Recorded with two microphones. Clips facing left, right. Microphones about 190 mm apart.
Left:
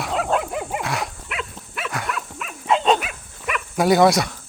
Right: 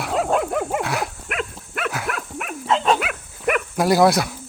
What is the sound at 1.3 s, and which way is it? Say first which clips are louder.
Livestock: right 4 dB; 50° right (ahead or behind).